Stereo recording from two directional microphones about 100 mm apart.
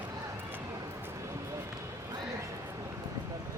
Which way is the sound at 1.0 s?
30° right (ahead or behind).